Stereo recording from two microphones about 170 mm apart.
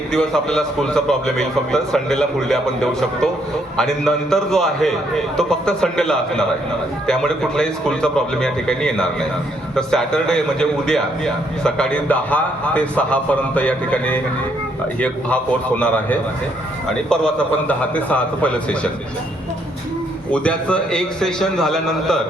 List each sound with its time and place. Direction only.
0.1 s a man's voice: 5° left (ahead or behind)
17.1 s a man's voice: 5° left (ahead or behind)
20.3 s a man's voice: 5° left (ahead or behind)